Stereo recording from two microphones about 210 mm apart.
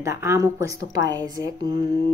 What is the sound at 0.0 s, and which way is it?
Speech, 15° right (ahead or behind).